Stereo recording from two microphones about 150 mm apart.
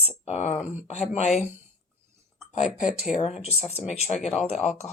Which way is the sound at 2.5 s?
55° left (ahead or behind).